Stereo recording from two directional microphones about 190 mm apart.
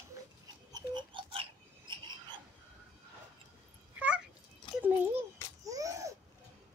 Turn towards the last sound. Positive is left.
turn(degrees=-15)  # may be behind; listen again after turning